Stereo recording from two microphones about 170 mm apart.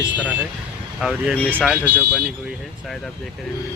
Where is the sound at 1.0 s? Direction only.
Centre (ahead or behind).